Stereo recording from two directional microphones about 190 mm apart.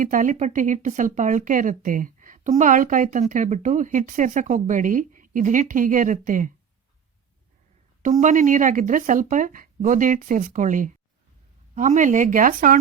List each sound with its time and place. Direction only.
0.0 s speech: 45° right (ahead or behind)
8.0 s speech: 40° right (ahead or behind)